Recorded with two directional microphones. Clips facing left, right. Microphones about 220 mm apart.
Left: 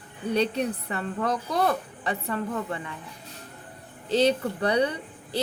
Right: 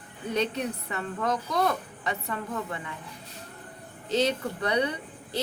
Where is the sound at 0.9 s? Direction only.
30° left (ahead or behind).